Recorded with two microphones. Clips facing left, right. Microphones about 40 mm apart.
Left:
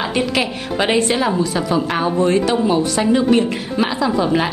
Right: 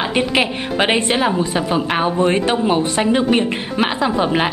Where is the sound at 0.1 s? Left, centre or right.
Right.